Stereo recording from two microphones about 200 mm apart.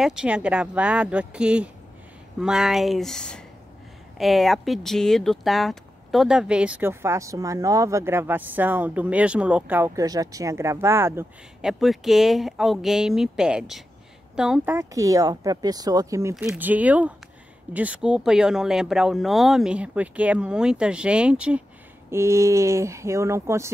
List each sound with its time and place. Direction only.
0.0 s speech: 5° right (ahead or behind)
11.8 s speech: centre (ahead or behind)